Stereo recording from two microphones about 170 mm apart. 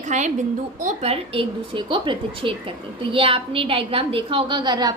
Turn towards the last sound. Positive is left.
turn(degrees=-25)  # may be behind; listen again after turning